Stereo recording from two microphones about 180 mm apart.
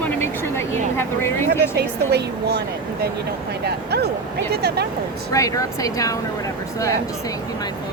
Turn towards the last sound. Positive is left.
turn(degrees=20)  # may be behind; listen again after turning